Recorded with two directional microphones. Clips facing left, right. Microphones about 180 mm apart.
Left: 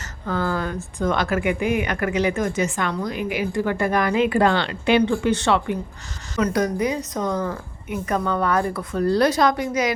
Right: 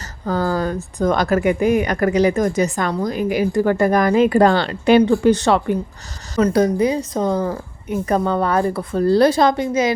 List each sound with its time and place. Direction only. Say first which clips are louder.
0.3 s speech: right 5 dB; 35° right (ahead or behind)